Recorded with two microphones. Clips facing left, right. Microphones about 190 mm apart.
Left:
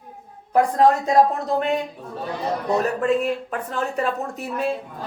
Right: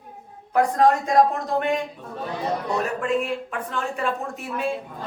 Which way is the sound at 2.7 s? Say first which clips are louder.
Left 5 dB; 40° left (ahead or behind).